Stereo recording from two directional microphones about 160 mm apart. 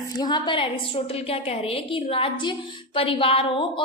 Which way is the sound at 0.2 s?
30° left (ahead or behind).